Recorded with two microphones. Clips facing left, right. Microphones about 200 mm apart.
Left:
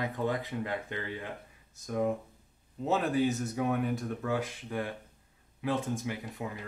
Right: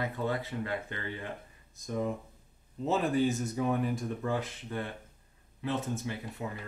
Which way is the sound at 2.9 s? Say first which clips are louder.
Even; centre (ahead or behind).